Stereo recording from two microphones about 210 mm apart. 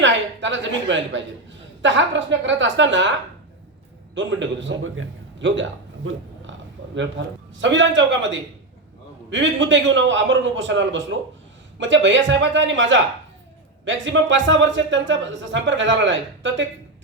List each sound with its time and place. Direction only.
0.0 s a woman's voice: 60° right (ahead or behind)
4.1 s speech: 60° right (ahead or behind)
6.0 s a sound: 70° right (ahead or behind)
7.6 s speech: 60° right (ahead or behind)